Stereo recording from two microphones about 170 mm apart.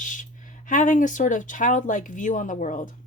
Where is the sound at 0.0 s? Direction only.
50° left (ahead or behind).